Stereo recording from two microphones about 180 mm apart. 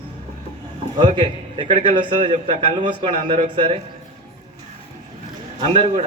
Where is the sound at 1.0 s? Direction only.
30° right (ahead or behind).